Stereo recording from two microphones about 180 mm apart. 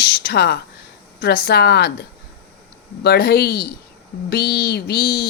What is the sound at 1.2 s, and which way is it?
Speech, 60° left (ahead or behind).